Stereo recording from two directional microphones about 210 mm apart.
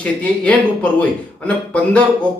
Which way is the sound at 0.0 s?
5° left (ahead or behind).